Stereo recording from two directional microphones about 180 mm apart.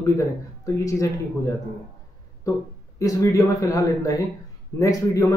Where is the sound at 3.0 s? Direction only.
20° left (ahead or behind).